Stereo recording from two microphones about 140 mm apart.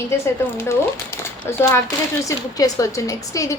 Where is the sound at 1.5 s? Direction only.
20° left (ahead or behind).